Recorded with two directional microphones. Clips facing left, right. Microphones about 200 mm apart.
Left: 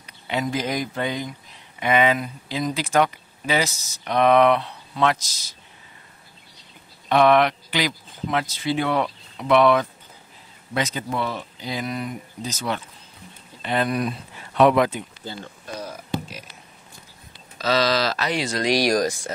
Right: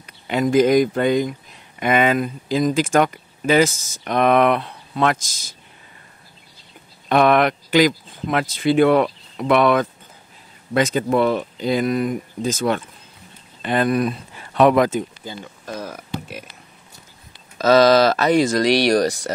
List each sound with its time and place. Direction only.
0.0 s speech: 50° right (ahead or behind)
7.1 s speech: 50° right (ahead or behind)
15.6 s a sound: 55° right (ahead or behind)
17.6 s speech: 50° right (ahead or behind); by 19.0 s 65° right (ahead or behind)